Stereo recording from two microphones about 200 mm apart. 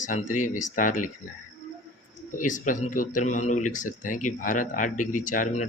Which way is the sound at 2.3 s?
40° left (ahead or behind).